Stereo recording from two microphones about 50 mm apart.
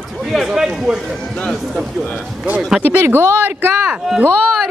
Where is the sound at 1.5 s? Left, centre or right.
Centre.